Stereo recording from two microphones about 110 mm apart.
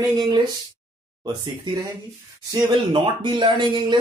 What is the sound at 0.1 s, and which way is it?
Speech, 45° right (ahead or behind).